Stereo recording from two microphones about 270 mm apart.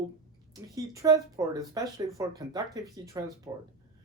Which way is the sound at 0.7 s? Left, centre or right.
Centre.